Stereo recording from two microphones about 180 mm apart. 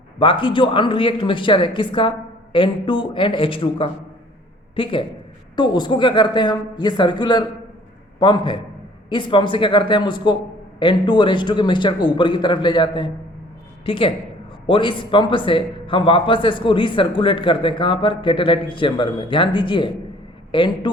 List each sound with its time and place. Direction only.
0.2 s a man's voice: 30° left (ahead or behind)